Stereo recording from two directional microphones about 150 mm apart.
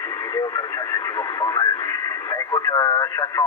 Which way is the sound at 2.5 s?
20° left (ahead or behind).